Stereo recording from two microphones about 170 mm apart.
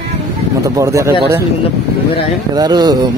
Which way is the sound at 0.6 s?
20° right (ahead or behind).